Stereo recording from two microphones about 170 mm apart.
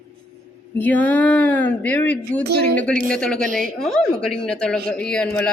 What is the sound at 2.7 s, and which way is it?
A woman's voice, 5° left (ahead or behind).